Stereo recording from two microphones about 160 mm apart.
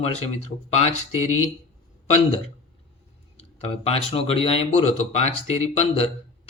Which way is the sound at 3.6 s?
40° left (ahead or behind).